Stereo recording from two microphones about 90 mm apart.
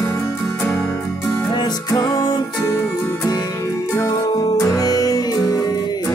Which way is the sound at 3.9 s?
35° left (ahead or behind).